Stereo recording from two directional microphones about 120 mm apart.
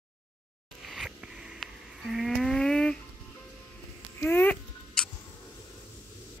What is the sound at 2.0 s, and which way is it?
Livestock, centre (ahead or behind).